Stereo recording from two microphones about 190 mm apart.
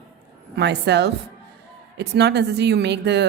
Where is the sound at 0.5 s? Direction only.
65° right (ahead or behind).